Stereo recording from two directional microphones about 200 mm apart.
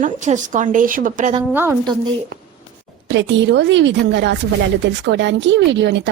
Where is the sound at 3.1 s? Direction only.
65° right (ahead or behind).